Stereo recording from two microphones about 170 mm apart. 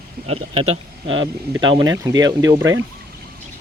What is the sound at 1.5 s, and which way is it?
Speech, 25° right (ahead or behind).